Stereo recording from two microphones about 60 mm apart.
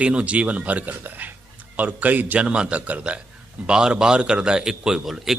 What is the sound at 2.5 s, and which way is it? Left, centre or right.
A man's voice, centre.